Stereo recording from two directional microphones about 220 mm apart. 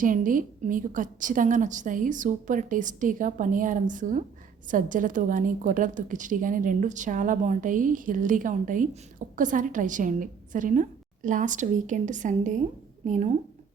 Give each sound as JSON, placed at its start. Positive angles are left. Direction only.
{"t": 0.0, "sound": "a woman's voice", "side_deg": -35}